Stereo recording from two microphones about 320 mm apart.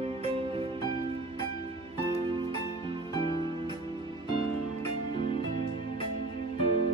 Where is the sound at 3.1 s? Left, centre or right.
Centre.